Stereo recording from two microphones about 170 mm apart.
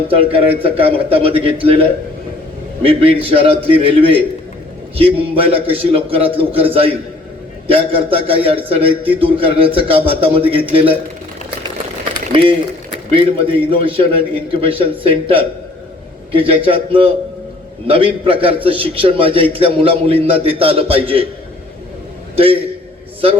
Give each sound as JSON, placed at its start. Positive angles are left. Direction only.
{"t": 0.1, "sound": "a man's voice", "side_deg": -35}
{"t": 12.1, "sound": "a man's voice", "side_deg": -30}